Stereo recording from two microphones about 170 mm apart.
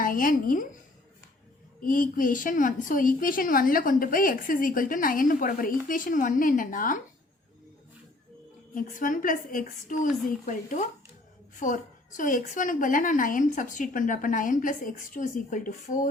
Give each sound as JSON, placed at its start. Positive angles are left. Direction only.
{"t": 0.0, "sound": "a woman's voice", "side_deg": 55}
{"t": 1.8, "sound": "a woman's voice", "side_deg": 55}
{"t": 8.7, "sound": "a woman's voice", "side_deg": 50}